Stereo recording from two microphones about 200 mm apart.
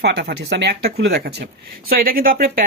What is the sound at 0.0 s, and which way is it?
Speech, 55° right (ahead or behind).